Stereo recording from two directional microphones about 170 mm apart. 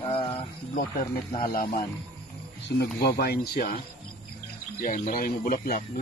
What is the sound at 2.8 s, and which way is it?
Speech, 70° left (ahead or behind).